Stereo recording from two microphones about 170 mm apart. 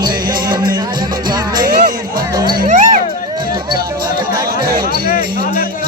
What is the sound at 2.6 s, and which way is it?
Music, 45° right (ahead or behind).